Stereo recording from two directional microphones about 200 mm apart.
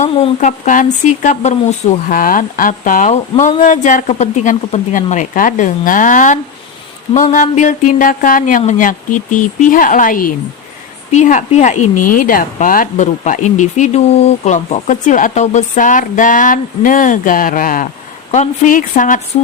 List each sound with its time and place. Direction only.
0.0 s a woman's voice: 30° left (ahead or behind)